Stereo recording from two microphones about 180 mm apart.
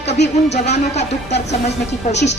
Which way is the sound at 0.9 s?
40° left (ahead or behind).